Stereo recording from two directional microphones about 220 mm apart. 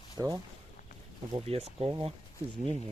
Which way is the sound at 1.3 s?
25° right (ahead or behind).